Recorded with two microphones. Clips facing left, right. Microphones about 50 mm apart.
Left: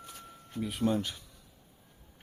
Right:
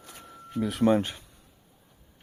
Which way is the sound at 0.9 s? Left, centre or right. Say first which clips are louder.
Right 9 dB; right.